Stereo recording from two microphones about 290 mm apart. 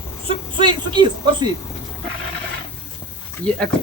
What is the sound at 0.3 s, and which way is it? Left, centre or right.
Speech, centre.